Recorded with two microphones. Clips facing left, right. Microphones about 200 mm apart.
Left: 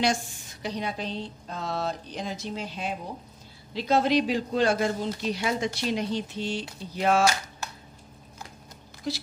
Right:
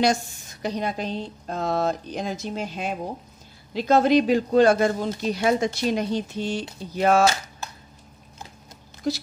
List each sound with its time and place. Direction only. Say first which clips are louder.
0.0 s a woman's voice: right 4 dB; 45° right (ahead or behind)
9.1 s a woman's voice: right 6 dB; 45° right (ahead or behind)